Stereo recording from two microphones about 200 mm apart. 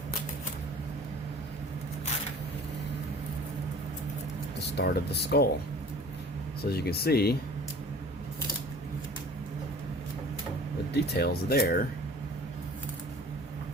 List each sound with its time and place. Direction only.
4.6 s speech: 55° left (ahead or behind)
6.6 s speech: 50° left (ahead or behind)
10.9 s speech: 55° left (ahead or behind)